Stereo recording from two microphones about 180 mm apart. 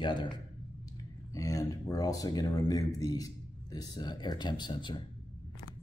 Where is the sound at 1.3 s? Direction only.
20° left (ahead or behind).